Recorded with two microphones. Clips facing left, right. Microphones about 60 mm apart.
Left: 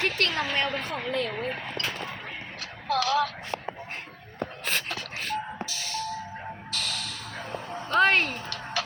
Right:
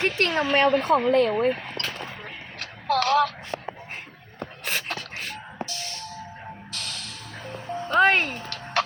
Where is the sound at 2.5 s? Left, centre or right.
Right.